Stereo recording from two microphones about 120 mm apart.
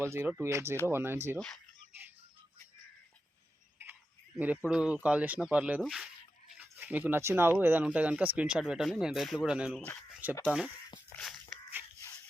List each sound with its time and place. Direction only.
0.0 s speech: 20° right (ahead or behind)
4.4 s speech: 15° right (ahead or behind)
5.8 s speech: centre (ahead or behind)
6.6 s speech: 15° right (ahead or behind)
11.2 s a sound: 5° left (ahead or behind)